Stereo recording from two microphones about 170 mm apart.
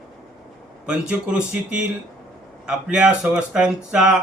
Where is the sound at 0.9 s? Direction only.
5° right (ahead or behind).